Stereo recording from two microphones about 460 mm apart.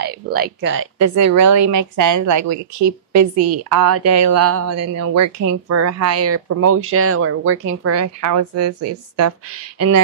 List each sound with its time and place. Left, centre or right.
0.0 s speech: centre
0.9 s speech: right